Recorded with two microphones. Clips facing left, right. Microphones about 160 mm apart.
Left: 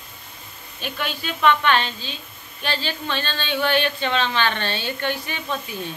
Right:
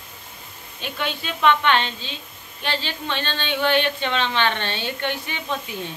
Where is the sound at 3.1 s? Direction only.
25° right (ahead or behind).